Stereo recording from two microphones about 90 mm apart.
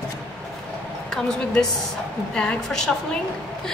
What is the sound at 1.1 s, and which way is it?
A woman's voice, 5° left (ahead or behind).